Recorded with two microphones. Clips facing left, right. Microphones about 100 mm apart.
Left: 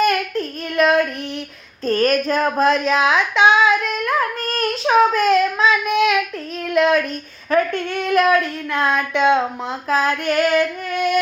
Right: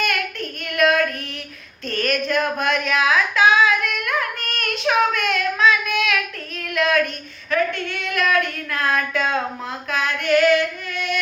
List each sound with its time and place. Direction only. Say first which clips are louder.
0.0 s child singing: left 6 dB; 30° left (ahead or behind)
1.8 s a sound: left 6 dB; 40° left (ahead or behind)
7.5 s child singing: left 4 dB; 45° left (ahead or behind); by 9.4 s 20° left (ahead or behind)
9.9 s female singing: left 1 dB; 40° left (ahead or behind)